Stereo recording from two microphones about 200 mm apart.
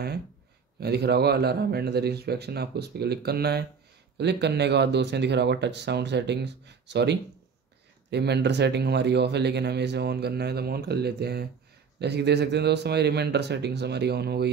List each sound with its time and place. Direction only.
0.7 s speech: 55° right (ahead or behind)